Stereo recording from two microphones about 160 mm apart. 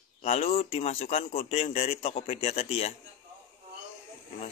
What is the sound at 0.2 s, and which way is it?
A man's voice, 40° left (ahead or behind).